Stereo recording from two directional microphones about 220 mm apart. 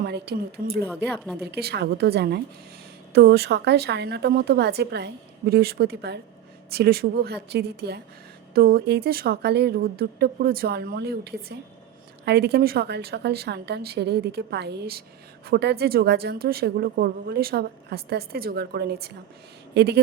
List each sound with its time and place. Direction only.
0.0 s a woman's voice: 50° right (ahead or behind)